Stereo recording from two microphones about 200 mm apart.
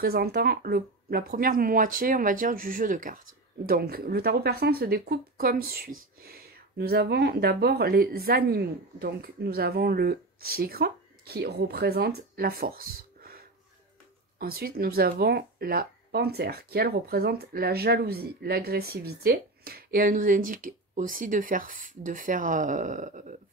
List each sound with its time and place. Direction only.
0.0 s speech: 50° right (ahead or behind)
14.4 s speech: 50° right (ahead or behind)